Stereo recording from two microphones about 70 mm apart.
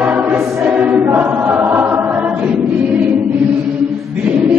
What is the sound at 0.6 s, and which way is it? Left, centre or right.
Choir, centre.